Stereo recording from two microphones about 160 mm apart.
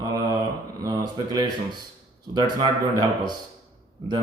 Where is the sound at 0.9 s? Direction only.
25° right (ahead or behind).